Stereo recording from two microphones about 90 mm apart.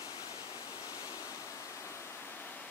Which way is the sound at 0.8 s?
45° left (ahead or behind).